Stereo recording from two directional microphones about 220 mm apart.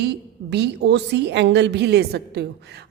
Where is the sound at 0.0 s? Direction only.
50° right (ahead or behind).